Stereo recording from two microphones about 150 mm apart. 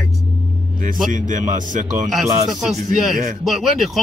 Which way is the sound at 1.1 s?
60° right (ahead or behind).